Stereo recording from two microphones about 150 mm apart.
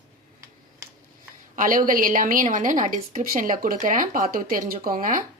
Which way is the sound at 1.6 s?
65° right (ahead or behind).